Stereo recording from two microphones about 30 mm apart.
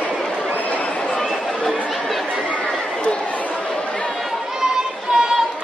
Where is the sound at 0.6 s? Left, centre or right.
Left.